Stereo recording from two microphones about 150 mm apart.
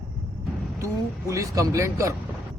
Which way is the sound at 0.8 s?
20° right (ahead or behind).